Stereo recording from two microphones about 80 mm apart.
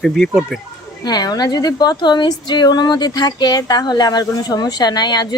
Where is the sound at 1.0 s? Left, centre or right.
Left.